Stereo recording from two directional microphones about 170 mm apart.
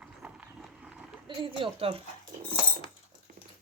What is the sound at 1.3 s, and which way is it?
Speech, 30° right (ahead or behind).